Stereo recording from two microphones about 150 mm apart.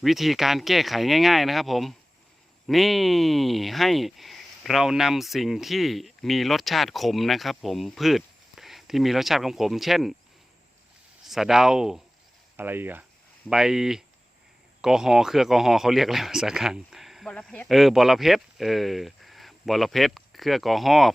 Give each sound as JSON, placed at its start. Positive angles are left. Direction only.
{"t": 0.0, "sound": "speech", "side_deg": 0}
{"t": 11.3, "sound": "speech", "side_deg": 0}